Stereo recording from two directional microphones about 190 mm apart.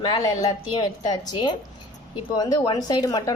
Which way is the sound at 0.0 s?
20° left (ahead or behind).